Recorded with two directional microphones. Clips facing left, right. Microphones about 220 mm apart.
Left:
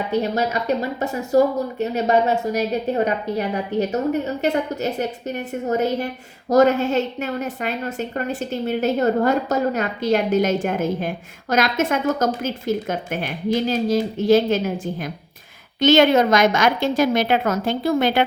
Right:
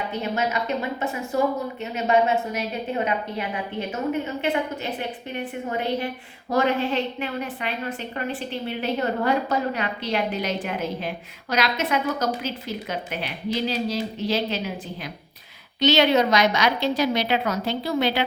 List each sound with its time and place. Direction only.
0.2 s a woman's voice: 40° left (ahead or behind)